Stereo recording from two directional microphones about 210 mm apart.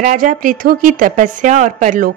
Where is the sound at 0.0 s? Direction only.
40° right (ahead or behind).